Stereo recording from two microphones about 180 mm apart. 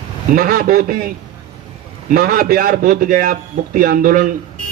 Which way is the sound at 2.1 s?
55° right (ahead or behind).